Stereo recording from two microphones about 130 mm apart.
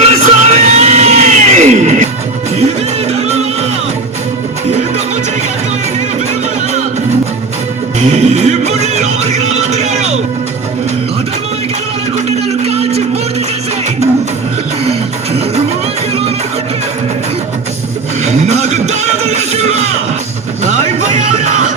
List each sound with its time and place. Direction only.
0.0 s music: 55° right (ahead or behind)
8.1 s music: 60° right (ahead or behind)
12.6 s a sound: 55° right (ahead or behind)
14.8 s music: 50° right (ahead or behind)
18.3 s music: 60° right (ahead or behind)
21.2 s music: 75° right (ahead or behind)